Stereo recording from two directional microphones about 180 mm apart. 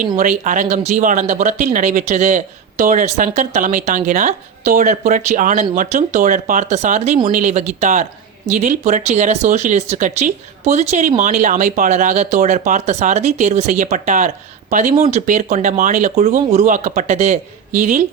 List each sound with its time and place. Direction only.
0.2 s speech: 45° right (ahead or behind)